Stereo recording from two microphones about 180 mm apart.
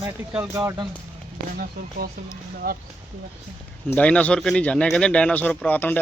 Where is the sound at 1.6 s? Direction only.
60° right (ahead or behind).